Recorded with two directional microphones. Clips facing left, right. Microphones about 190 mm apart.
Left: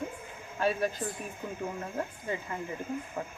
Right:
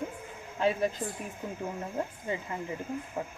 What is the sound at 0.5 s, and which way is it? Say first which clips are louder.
Speech: right 1 dB; 25° right (ahead or behind).